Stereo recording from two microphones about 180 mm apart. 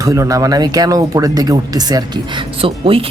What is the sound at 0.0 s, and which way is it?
Speech, 20° right (ahead or behind).